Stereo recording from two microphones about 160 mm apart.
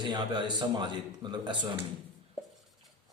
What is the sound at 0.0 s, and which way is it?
A man's voice, 30° right (ahead or behind).